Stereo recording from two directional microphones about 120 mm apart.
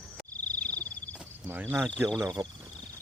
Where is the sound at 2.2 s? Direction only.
40° right (ahead or behind).